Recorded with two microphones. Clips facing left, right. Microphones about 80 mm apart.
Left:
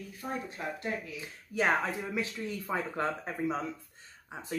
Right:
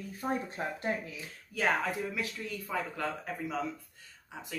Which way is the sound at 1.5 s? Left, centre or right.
Left.